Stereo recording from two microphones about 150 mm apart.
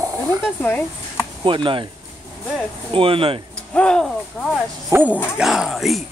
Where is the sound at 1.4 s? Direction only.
35° right (ahead or behind).